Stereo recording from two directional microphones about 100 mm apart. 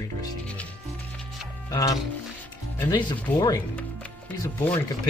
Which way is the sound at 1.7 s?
35° left (ahead or behind).